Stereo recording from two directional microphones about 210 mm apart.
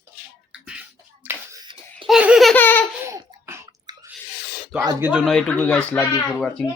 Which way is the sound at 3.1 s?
15° right (ahead or behind).